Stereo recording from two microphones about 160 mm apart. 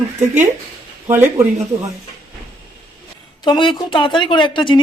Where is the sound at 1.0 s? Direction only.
15° right (ahead or behind).